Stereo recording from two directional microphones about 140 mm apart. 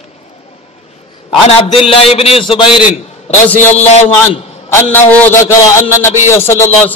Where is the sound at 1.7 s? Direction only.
40° left (ahead or behind).